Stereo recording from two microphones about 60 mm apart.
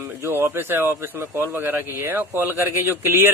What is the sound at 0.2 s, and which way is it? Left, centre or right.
A man's voice, right.